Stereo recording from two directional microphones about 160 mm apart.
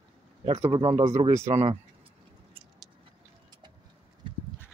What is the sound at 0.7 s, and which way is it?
Speech, 40° right (ahead or behind).